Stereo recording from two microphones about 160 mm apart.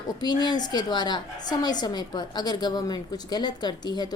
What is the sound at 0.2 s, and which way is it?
A woman's voice, 25° left (ahead or behind).